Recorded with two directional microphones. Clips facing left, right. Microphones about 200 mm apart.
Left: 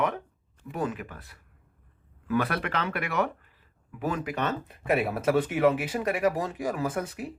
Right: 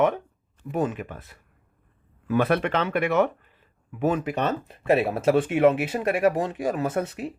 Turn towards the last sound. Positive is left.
turn(degrees=-25)  # may be behind; listen again after turning